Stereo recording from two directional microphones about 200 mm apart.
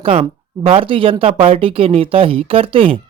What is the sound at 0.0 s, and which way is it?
Speech, 30° right (ahead or behind).